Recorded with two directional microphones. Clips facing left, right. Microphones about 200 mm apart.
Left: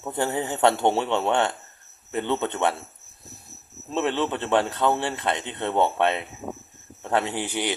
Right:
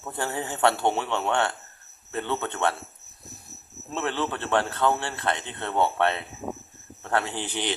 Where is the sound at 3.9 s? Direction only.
20° left (ahead or behind).